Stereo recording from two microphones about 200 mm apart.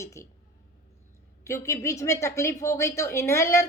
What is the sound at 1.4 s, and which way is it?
Speech, 15° left (ahead or behind).